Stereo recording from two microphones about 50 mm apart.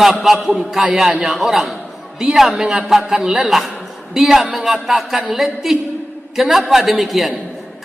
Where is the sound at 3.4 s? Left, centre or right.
Centre.